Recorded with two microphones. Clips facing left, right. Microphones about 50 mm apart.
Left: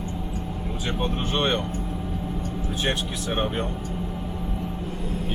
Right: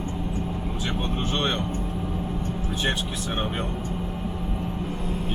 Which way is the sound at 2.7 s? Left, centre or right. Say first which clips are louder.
Left 1 dB; centre.